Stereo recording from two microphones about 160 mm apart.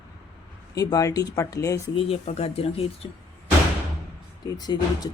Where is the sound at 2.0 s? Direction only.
40° left (ahead or behind).